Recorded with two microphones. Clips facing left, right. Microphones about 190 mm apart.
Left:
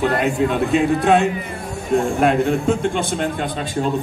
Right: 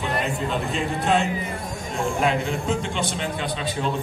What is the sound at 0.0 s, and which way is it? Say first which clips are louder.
A man's voice: left 8 dB; 60° left (ahead or behind).